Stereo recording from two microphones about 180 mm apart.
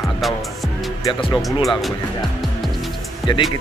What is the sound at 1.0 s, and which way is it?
Speech, 20° left (ahead or behind).